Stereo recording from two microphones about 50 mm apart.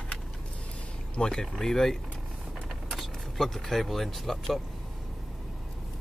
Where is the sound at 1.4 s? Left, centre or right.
Centre.